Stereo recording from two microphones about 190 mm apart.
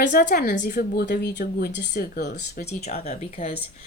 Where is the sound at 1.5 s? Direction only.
60° left (ahead or behind).